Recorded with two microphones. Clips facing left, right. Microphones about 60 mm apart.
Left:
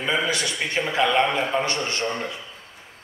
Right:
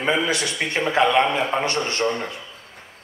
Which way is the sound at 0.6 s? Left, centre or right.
Right.